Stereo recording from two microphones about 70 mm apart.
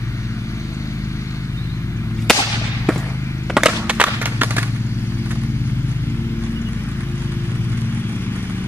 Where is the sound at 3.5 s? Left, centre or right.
Centre.